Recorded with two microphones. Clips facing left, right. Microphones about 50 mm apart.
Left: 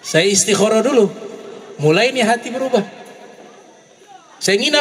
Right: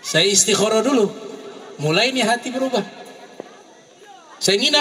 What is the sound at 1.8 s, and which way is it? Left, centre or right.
A man's voice, left.